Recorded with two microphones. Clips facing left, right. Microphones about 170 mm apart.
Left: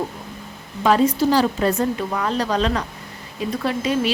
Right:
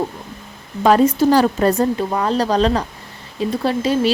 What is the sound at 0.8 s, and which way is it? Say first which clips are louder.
Speech: right 4 dB; 45° right (ahead or behind).